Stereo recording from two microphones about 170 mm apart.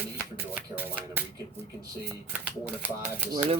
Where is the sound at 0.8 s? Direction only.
10° right (ahead or behind).